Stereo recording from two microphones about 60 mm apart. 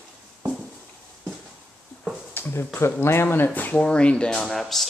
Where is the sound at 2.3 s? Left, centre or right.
Left.